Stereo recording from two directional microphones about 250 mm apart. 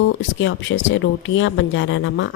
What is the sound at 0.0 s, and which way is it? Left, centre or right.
Speech, left.